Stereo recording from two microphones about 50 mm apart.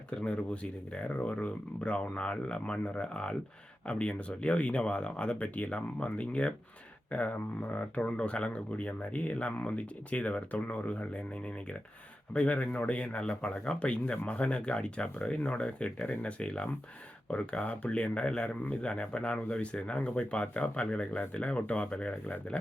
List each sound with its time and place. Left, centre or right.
0.1 s speech: left